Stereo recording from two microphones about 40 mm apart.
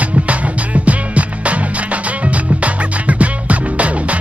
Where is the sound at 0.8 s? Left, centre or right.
Right.